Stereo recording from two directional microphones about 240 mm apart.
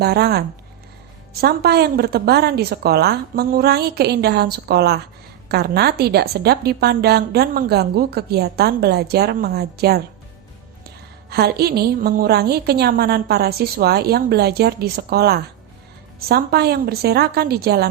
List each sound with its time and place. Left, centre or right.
0.0 s a woman's voice: right
11.3 s a woman's voice: right